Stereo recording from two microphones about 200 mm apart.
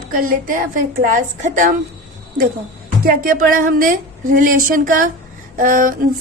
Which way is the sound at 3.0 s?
45° right (ahead or behind).